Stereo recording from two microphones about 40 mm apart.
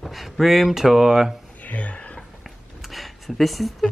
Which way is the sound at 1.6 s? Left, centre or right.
Left.